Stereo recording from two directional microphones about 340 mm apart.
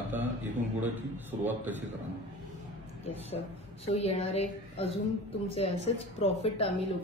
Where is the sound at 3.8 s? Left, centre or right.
Centre.